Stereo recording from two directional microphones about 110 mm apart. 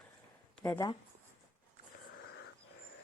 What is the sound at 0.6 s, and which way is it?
Speech, 30° left (ahead or behind).